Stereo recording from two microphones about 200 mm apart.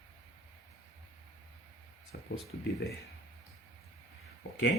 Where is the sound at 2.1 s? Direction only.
50° left (ahead or behind).